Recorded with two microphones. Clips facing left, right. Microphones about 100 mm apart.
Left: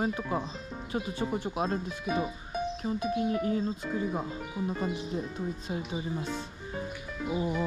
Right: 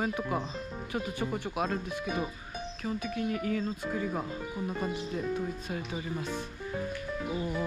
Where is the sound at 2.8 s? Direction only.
30° left (ahead or behind).